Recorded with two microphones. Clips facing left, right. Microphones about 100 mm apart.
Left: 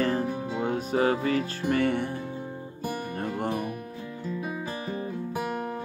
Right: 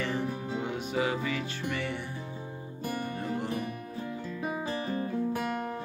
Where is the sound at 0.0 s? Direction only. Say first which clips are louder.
Left 5 dB; 40° left (ahead or behind); by 2.0 s 55° left (ahead or behind).